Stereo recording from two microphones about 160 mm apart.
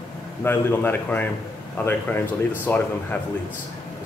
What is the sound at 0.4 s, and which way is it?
Speech, 15° left (ahead or behind).